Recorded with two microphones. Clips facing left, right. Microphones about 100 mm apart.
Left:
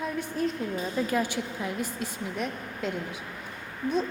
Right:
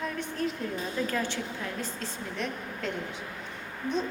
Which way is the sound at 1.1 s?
10° left (ahead or behind).